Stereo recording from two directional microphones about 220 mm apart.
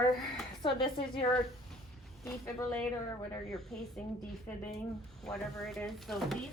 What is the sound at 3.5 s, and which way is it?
Speech, centre (ahead or behind).